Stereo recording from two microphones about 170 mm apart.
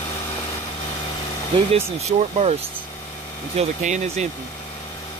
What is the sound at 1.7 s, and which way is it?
Speech, 40° right (ahead or behind).